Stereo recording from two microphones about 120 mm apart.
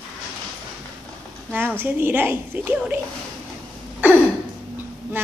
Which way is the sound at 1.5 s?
15° right (ahead or behind).